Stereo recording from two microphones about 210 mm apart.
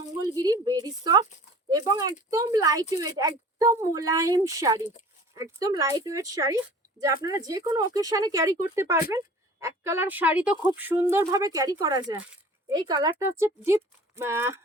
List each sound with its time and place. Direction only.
0.3 s speech: 20° right (ahead or behind)